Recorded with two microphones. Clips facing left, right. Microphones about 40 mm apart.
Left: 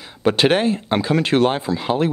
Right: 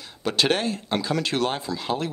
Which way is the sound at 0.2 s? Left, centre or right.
Left.